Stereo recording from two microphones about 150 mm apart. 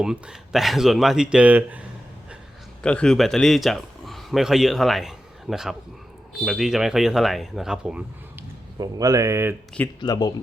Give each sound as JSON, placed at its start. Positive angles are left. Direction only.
{"t": 0.0, "sound": "speech", "side_deg": -5}
{"t": 2.8, "sound": "a man's voice", "side_deg": 5}
{"t": 8.8, "sound": "speech", "side_deg": -25}
{"t": 10.0, "sound": "speech", "side_deg": 25}